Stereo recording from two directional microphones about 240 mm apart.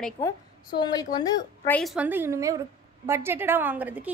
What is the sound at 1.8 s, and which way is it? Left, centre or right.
A woman's voice, centre.